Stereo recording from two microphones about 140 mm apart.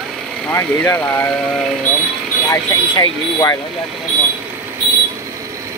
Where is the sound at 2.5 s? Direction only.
30° left (ahead or behind).